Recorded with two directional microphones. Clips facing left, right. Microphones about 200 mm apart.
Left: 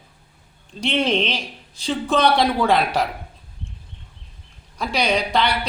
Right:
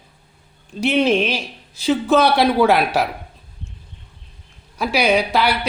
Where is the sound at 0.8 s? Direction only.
5° right (ahead or behind).